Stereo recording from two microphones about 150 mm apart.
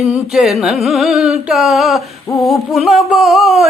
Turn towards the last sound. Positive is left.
turn(degrees=0)  # may be behind; listen again after turning